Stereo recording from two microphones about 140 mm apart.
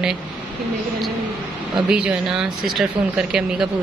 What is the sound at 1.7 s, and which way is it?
Speech, 5° right (ahead or behind).